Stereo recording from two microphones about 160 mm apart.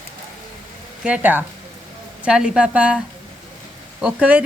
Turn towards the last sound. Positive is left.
turn(degrees=-10)  # may be behind; listen again after turning